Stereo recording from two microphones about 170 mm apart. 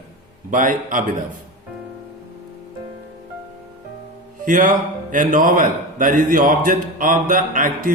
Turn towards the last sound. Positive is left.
turn(degrees=-55)  # may be behind; listen again after turning